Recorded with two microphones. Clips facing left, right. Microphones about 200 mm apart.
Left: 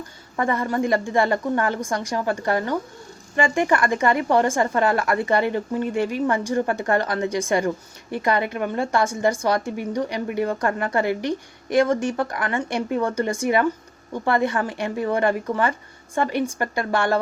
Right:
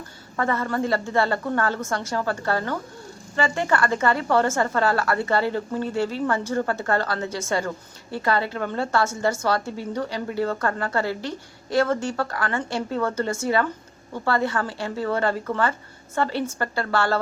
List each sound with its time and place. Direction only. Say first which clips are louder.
0.3 s a woman's voice: left 2 dB; 15° left (ahead or behind)